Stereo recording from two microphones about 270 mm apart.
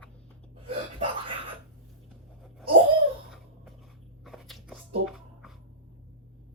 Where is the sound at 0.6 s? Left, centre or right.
Centre.